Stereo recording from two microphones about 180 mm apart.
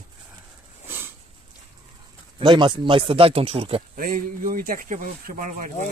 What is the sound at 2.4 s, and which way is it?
Speech, 25° right (ahead or behind).